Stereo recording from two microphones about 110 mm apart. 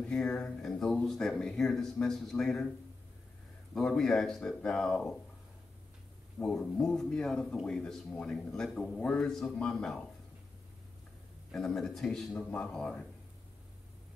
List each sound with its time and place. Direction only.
0.0 s speech: 10° left (ahead or behind)
3.7 s speech: 5° left (ahead or behind)
6.4 s speech: 5° left (ahead or behind)
11.5 s speech: 5° left (ahead or behind)